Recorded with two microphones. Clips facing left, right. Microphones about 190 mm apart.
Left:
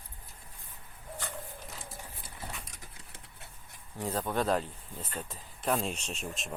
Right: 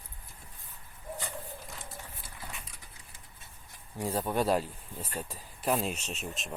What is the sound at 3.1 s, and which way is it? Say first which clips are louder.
Dog: left 3 dB; 70° left (ahead or behind).